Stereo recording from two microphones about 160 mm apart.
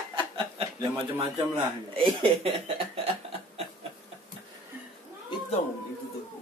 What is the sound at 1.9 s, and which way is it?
Speech, 35° right (ahead or behind).